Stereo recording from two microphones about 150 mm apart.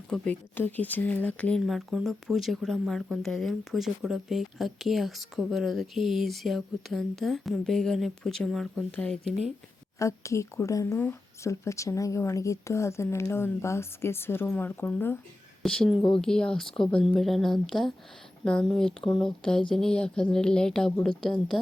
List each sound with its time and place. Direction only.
0.1 s speech: 10° left (ahead or behind)
1.6 s speech: centre (ahead or behind)
10.0 s speech: 20° left (ahead or behind); by 21.6 s centre (ahead or behind)